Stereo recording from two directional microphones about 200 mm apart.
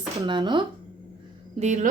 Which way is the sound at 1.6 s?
35° right (ahead or behind).